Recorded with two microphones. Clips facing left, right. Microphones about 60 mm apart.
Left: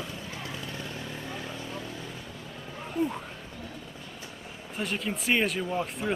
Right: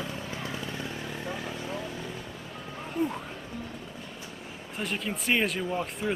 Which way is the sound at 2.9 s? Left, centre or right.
Centre.